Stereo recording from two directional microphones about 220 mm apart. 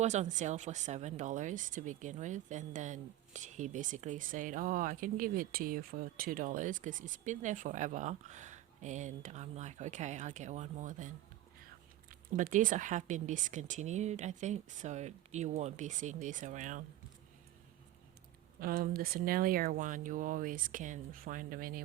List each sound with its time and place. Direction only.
0.0 s speech: 30° right (ahead or behind)
12.4 s speech: 35° right (ahead or behind)
18.6 s speech: 40° right (ahead or behind)